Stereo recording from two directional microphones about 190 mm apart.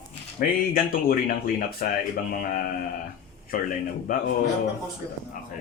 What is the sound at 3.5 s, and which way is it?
Speech, 45° left (ahead or behind).